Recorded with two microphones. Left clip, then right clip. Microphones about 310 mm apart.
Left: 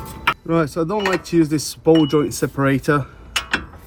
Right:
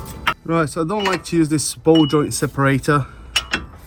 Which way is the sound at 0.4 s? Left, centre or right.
Right.